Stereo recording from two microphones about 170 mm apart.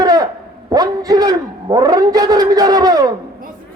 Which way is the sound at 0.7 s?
25° right (ahead or behind).